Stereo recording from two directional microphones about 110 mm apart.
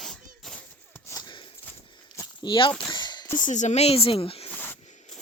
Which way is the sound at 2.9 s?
40° left (ahead or behind).